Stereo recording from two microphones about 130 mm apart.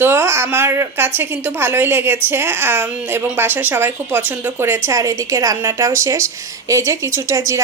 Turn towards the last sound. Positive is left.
turn(degrees=-25)  # may be behind; listen again after turning